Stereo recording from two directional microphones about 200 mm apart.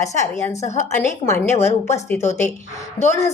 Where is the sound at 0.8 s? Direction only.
15° left (ahead or behind).